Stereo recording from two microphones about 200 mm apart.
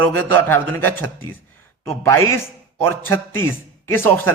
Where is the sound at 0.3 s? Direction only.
10° left (ahead or behind).